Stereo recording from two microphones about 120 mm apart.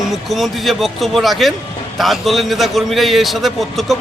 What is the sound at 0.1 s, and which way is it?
Speech, centre (ahead or behind).